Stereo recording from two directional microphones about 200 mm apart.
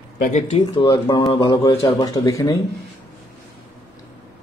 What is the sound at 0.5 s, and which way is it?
Speech, 25° left (ahead or behind).